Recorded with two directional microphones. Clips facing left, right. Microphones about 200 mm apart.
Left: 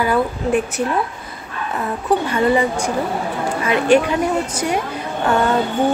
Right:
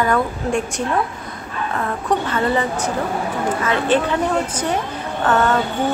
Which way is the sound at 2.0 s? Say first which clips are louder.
Left 4 dB; 10° left (ahead or behind).